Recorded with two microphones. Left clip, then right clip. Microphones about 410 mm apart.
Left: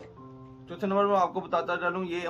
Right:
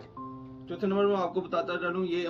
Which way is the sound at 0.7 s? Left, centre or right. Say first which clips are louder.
Left 2 dB; centre.